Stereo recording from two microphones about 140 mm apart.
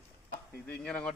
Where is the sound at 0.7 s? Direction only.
10° left (ahead or behind).